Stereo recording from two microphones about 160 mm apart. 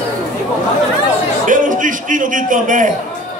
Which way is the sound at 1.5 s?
55° right (ahead or behind).